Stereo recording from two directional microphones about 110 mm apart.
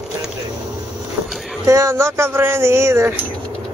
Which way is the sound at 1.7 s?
25° right (ahead or behind).